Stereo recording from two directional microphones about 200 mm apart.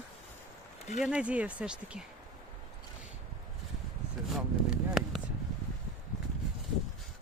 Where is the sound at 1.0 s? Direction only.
5° right (ahead or behind).